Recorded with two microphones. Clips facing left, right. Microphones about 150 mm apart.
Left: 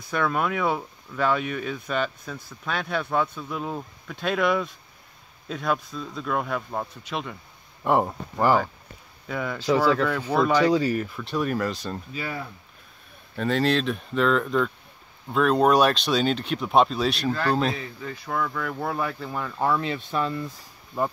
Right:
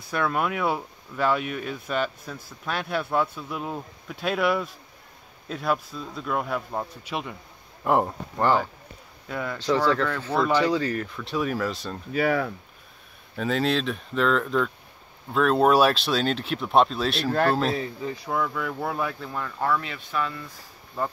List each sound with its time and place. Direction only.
0.1 s speech: 5° right (ahead or behind)
12.1 s speech: 70° right (ahead or behind)
13.4 s speech: centre (ahead or behind)
18.0 s speech: 15° right (ahead or behind); by 19.7 s 10° left (ahead or behind)
19.7 s speech: 30° left (ahead or behind)